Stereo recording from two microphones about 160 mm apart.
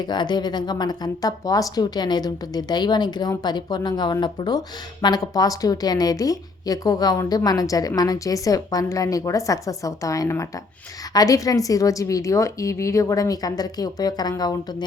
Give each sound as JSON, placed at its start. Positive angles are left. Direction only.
{"t": 0.0, "sound": "speech", "side_deg": 30}